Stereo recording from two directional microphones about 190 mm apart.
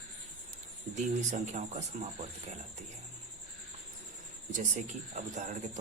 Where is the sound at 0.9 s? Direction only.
40° right (ahead or behind).